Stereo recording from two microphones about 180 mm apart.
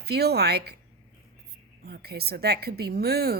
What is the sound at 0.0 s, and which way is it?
Speech, 65° right (ahead or behind).